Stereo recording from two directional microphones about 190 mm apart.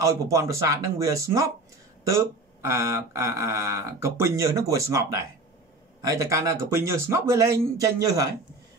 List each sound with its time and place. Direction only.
0.0 s speech: 15° right (ahead or behind)